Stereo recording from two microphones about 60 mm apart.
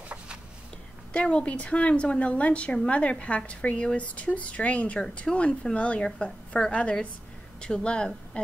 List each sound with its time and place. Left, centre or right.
1.1 s a woman's voice: centre